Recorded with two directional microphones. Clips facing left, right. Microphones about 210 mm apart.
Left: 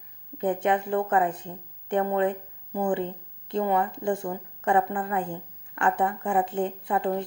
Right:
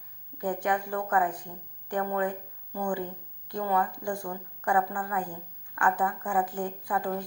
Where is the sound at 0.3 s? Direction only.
25° left (ahead or behind).